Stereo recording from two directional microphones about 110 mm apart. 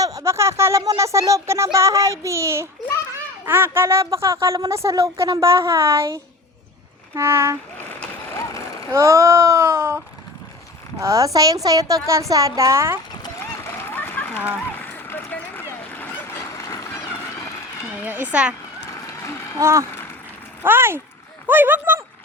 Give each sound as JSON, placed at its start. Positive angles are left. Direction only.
{"t": 0.0, "sound": "speech", "side_deg": -30}
{"t": 7.2, "sound": "speech", "side_deg": -25}
{"t": 7.8, "sound": "vehicle", "side_deg": 20}
{"t": 8.4, "sound": "vehicle", "side_deg": 30}
{"t": 8.9, "sound": "speech", "side_deg": -25}
{"t": 11.0, "sound": "speech", "side_deg": -30}
{"t": 13.7, "sound": "splash", "side_deg": 20}
{"t": 14.7, "sound": "a sound", "side_deg": 15}
{"t": 18.0, "sound": "speech", "side_deg": -15}
{"t": 18.9, "sound": "run", "side_deg": 25}
{"t": 19.5, "sound": "speech", "side_deg": -25}